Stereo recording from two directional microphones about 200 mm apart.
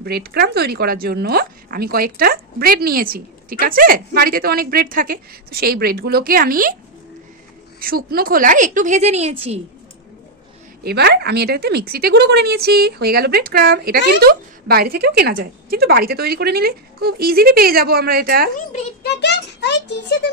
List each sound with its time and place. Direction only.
0.0 s speech: 50° right (ahead or behind)
7.8 s a woman's voice: 45° right (ahead or behind); by 9.6 s 30° right (ahead or behind)
10.8 s speech: 50° right (ahead or behind)
19.0 s a sound: 60° left (ahead or behind)